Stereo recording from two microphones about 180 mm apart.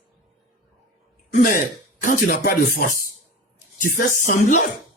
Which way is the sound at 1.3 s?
45° left (ahead or behind).